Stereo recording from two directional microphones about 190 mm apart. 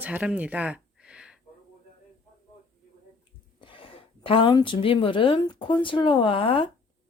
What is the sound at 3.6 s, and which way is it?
A woman's voice, 25° left (ahead or behind).